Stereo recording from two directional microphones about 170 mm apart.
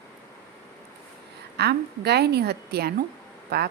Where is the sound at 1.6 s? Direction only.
75° right (ahead or behind).